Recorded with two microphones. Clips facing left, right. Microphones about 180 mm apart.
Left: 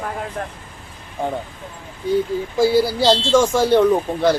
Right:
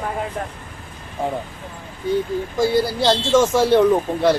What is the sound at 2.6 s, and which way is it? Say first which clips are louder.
Speech: left 3 dB; 5° left (ahead or behind).